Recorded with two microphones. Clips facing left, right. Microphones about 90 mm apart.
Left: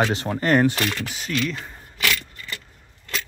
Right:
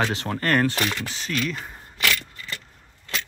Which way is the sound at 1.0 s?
5° left (ahead or behind).